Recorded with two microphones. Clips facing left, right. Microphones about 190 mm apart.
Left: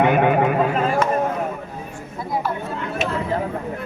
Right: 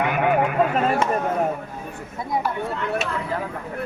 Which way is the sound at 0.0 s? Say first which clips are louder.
Left 5 dB; 25° left (ahead or behind).